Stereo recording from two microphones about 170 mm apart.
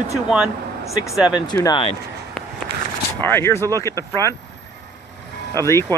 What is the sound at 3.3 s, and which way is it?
Speech, 15° left (ahead or behind).